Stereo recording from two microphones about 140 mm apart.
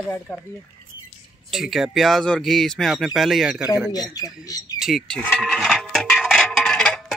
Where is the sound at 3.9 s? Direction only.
25° left (ahead or behind).